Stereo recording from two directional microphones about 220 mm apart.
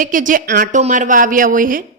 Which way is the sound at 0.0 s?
35° right (ahead or behind).